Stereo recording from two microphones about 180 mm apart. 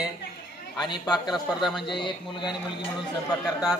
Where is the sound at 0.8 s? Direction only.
25° left (ahead or behind).